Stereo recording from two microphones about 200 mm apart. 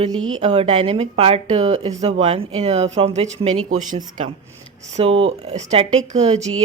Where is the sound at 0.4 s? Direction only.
30° right (ahead or behind).